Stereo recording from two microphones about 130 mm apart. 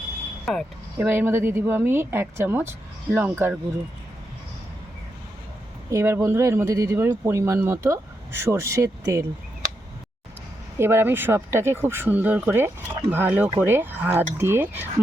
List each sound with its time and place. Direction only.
0.5 s speech: centre (ahead or behind)
0.9 s speech: 15° right (ahead or behind)
5.9 s speech: 20° right (ahead or behind)
10.8 s speech: 20° right (ahead or behind)